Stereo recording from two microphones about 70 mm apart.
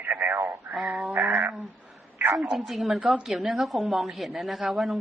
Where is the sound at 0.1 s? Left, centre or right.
Right.